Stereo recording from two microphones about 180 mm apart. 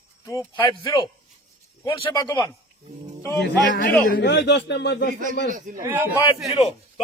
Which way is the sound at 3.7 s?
50° left (ahead or behind).